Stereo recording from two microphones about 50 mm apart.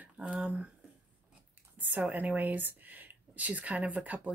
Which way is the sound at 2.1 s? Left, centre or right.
Right.